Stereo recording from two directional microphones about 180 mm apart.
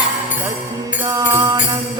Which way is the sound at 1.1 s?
20° right (ahead or behind).